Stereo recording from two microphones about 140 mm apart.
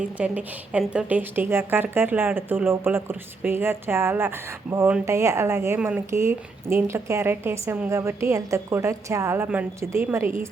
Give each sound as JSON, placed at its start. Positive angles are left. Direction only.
{"t": 0.2, "sound": "a woman's voice", "side_deg": -10}